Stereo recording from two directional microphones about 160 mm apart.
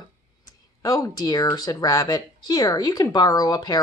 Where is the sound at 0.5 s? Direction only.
20° left (ahead or behind).